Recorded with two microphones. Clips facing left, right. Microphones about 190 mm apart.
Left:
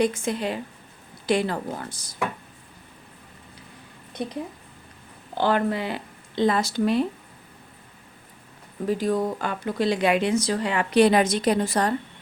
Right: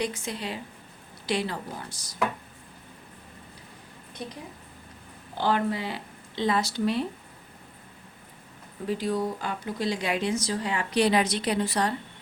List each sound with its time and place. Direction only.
0.0 s speech: 50° left (ahead or behind)
5.4 s speech: 60° left (ahead or behind)
8.9 s speech: 45° left (ahead or behind)